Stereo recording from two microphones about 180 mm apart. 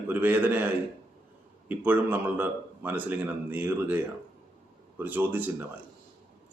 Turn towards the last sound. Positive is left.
turn(degrees=-10)  # may be behind; listen again after turning